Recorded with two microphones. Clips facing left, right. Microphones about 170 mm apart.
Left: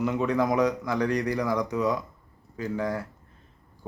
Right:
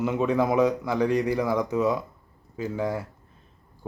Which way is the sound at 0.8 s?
10° right (ahead or behind).